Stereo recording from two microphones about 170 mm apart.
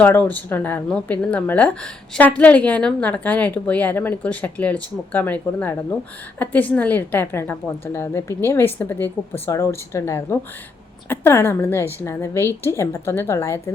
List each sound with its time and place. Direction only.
0.0 s speech: 10° left (ahead or behind)